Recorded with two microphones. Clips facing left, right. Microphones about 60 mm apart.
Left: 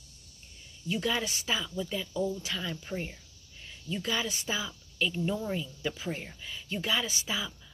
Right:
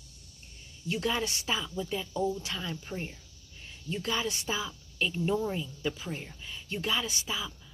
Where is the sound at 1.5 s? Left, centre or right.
Centre.